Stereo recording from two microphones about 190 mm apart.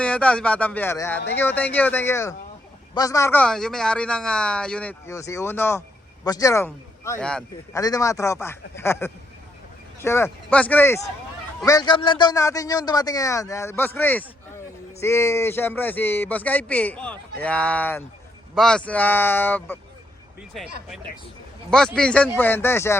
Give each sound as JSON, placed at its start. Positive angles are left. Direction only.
{"t": 0.0, "sound": "speech", "side_deg": 5}
{"t": 7.2, "sound": "speech", "side_deg": 5}
{"t": 7.7, "sound": "speech", "side_deg": 20}
{"t": 21.9, "sound": "speech", "side_deg": 5}